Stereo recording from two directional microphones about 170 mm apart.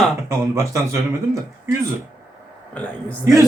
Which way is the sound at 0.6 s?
15° right (ahead or behind).